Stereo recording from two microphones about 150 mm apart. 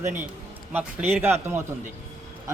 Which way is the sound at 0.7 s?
15° right (ahead or behind).